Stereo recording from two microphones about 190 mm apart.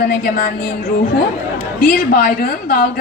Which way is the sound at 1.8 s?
50° left (ahead or behind).